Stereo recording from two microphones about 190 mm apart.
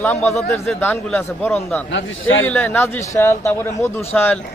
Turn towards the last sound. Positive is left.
turn(degrees=10)  # may be behind; listen again after turning